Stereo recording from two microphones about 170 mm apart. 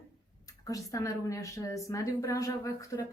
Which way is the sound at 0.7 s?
20° left (ahead or behind).